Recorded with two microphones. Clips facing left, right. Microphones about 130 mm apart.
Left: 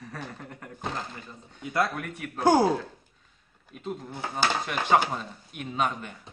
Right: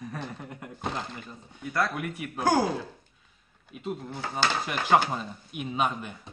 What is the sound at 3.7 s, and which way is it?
Speech, 5° right (ahead or behind).